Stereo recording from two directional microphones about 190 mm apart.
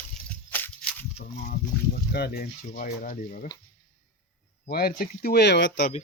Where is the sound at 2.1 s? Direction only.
55° left (ahead or behind).